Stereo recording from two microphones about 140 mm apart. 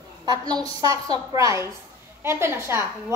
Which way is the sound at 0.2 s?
30° right (ahead or behind).